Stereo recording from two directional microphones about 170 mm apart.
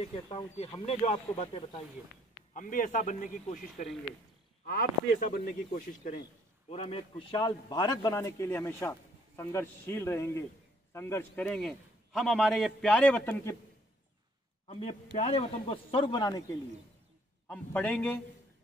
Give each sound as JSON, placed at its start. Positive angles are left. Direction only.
{"t": 0.0, "sound": "a man's voice", "side_deg": 35}
{"t": 2.5, "sound": "a man's voice", "side_deg": 50}
{"t": 4.6, "sound": "speech", "side_deg": 60}
{"t": 6.7, "sound": "a man's voice", "side_deg": 35}
{"t": 14.7, "sound": "a man's voice", "side_deg": 35}
{"t": 17.5, "sound": "a man's voice", "side_deg": 5}